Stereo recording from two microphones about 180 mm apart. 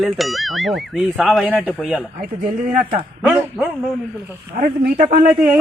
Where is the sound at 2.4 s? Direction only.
50° right (ahead or behind).